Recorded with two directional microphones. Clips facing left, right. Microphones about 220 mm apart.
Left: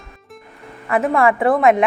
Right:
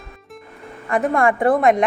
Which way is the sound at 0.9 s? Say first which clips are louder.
Left 2 dB; centre (ahead or behind).